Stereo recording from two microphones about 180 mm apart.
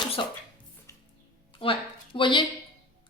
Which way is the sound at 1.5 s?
30° left (ahead or behind).